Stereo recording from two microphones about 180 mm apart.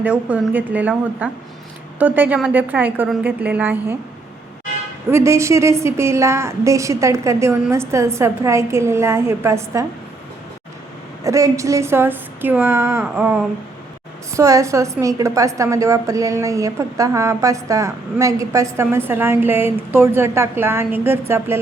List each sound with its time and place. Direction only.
0.0 s a woman's voice: 10° right (ahead or behind)
5.1 s a woman's voice: 15° right (ahead or behind)
11.2 s a woman's voice: 15° right (ahead or behind)